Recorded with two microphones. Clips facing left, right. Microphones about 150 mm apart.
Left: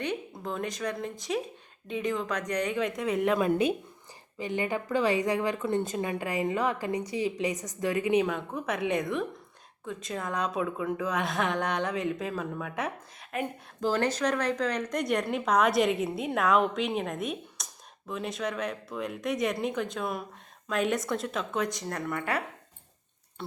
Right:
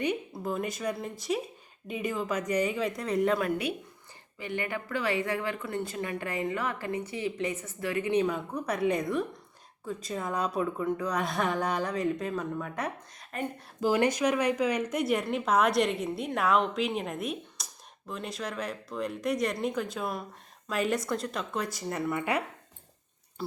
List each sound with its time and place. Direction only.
0.0 s a woman's voice: 10° right (ahead or behind)
3.3 s a woman's voice: 20° left (ahead or behind)
8.3 s a woman's voice: centre (ahead or behind)
13.8 s a woman's voice: 10° right (ahead or behind)
23.4 s a woman's voice: 5° right (ahead or behind)